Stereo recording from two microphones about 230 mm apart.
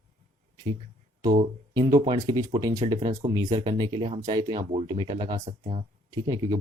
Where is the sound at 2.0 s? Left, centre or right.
Centre.